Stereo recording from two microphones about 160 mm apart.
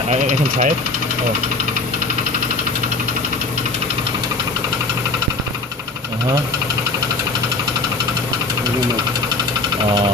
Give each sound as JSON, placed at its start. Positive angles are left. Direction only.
{"t": 0.1, "sound": "speech", "side_deg": -50}